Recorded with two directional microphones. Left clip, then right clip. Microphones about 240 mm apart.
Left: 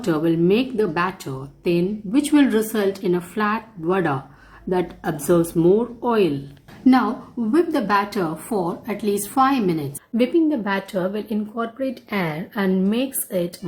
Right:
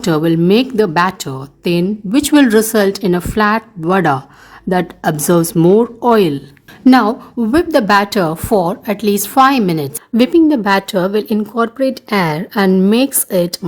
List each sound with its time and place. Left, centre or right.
0.0 s a woman's voice: right